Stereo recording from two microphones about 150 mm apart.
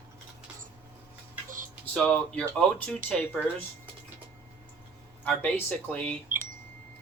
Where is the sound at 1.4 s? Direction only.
60° right (ahead or behind).